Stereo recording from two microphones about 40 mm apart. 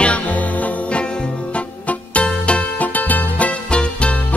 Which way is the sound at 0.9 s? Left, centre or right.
Left.